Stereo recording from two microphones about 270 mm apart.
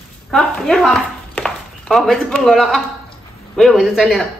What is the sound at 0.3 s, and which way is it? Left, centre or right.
A man's voice, centre.